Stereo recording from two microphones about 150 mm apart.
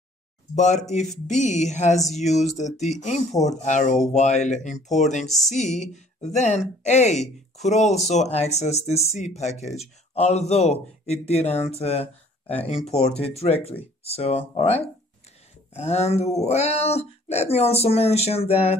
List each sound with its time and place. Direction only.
0.6 s speech: 55° left (ahead or behind)